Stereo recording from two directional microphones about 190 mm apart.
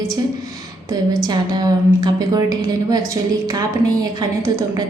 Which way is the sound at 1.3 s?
20° right (ahead or behind).